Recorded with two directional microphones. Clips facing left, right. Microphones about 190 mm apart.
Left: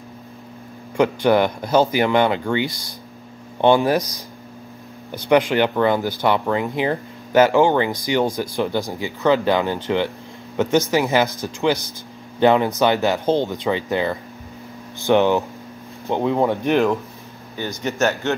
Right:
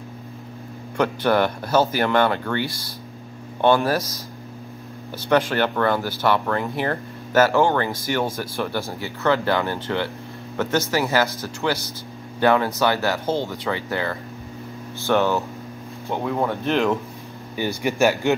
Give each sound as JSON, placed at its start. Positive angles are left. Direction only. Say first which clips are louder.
{"t": 0.9, "sound": "speech", "louder": "left 3 dB", "side_deg": 15}
{"t": 17.8, "sound": "speech", "louder": "right 1 dB", "side_deg": -15}